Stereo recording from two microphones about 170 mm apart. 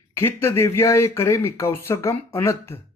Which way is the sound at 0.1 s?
15° left (ahead or behind).